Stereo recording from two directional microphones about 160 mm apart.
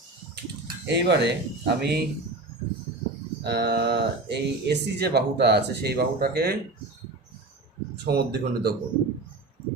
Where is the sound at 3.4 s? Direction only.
90° right.